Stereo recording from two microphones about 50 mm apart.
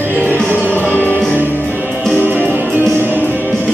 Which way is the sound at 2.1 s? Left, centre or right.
Right.